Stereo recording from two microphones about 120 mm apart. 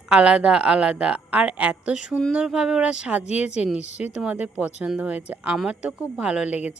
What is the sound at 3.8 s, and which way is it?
Speech, 70° left (ahead or behind).